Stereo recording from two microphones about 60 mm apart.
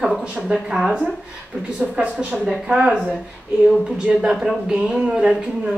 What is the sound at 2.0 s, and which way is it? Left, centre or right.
Speech, right.